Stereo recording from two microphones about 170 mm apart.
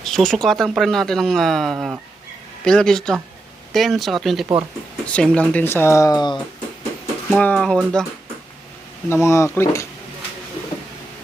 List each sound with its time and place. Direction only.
0.0 s speech: centre (ahead or behind); by 6.4 s 25° left (ahead or behind)
7.3 s speech: 5° left (ahead or behind)
9.0 s speech: 15° left (ahead or behind)